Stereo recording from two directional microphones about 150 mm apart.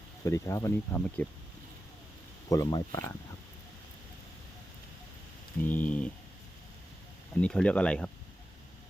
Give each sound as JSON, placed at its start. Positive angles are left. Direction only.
{"t": 0.3, "sound": "speech", "side_deg": 20}
{"t": 2.5, "sound": "speech", "side_deg": 20}
{"t": 5.6, "sound": "speech", "side_deg": 10}
{"t": 7.4, "sound": "speech", "side_deg": 5}